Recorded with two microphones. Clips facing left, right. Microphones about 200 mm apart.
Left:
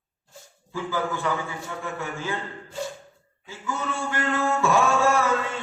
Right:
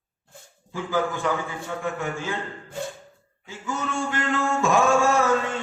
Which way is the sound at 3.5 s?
15° right (ahead or behind).